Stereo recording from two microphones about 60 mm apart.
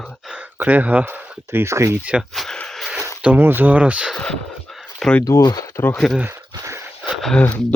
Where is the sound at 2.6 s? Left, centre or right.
Centre.